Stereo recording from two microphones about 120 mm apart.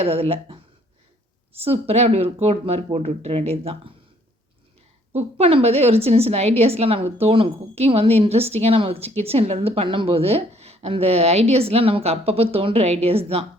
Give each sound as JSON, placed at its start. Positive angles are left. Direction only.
{"t": 0.0, "sound": "a woman's voice", "side_deg": -55}
{"t": 5.1, "sound": "a woman's voice", "side_deg": -50}